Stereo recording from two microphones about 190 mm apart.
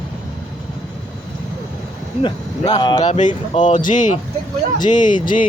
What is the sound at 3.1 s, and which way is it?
Speech, 40° left (ahead or behind).